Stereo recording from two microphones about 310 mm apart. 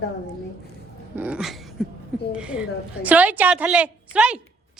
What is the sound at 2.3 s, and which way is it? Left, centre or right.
A woman's voice, centre.